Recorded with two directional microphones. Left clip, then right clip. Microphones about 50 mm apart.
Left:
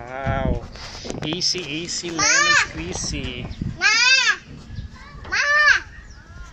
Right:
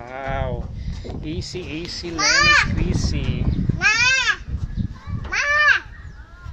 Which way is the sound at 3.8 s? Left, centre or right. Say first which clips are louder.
Left 1 dB; centre.